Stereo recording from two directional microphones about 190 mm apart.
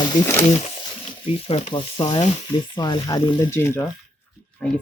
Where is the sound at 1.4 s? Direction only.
30° left (ahead or behind).